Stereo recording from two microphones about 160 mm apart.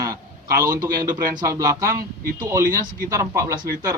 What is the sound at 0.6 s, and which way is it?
Speech, 15° right (ahead or behind).